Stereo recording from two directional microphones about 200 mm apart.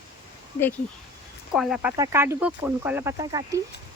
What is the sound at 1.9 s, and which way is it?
Speech, 15° right (ahead or behind).